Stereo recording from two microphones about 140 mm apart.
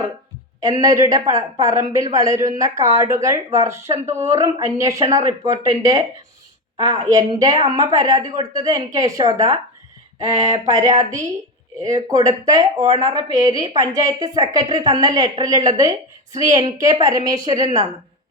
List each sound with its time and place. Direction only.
0.6 s a woman's voice: 25° right (ahead or behind)
10.9 s a woman's voice: 25° right (ahead or behind)